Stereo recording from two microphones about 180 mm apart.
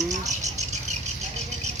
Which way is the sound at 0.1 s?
40° right (ahead or behind).